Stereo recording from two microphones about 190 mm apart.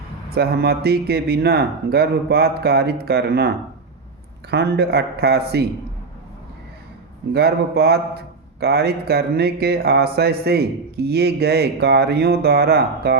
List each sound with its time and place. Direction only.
0.3 s speech: 55° right (ahead or behind)
4.5 s speech: 60° right (ahead or behind)
7.3 s speech: 55° right (ahead or behind)